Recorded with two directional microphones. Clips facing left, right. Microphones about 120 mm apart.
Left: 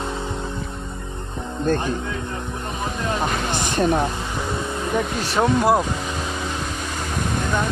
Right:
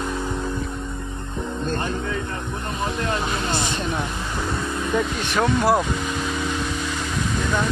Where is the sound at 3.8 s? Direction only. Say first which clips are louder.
Left 7 dB; 40° left (ahead or behind).